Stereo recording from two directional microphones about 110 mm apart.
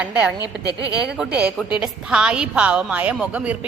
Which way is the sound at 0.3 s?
35° left (ahead or behind).